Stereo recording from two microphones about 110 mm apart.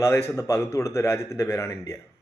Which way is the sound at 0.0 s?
25° left (ahead or behind).